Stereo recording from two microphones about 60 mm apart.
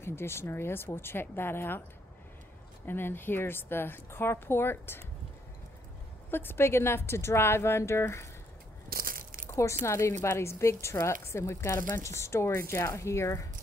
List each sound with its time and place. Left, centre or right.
0.0 s a woman's voice: left
2.9 s a woman's voice: left
6.3 s speech: left
9.5 s speech: left